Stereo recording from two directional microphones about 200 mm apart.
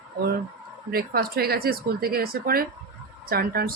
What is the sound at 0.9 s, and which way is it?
Speech, 50° right (ahead or behind).